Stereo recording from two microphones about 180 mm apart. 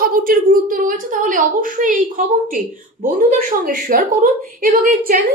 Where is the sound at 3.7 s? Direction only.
45° right (ahead or behind).